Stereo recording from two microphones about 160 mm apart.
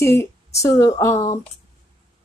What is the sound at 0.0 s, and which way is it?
Speech, 15° left (ahead or behind).